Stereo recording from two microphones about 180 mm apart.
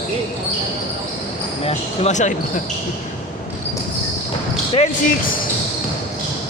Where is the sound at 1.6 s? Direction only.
35° left (ahead or behind).